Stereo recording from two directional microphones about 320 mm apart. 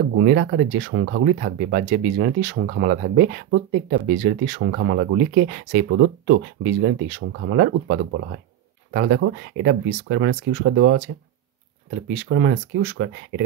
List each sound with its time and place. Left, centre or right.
0.2 s speech: right
12.1 s speech: right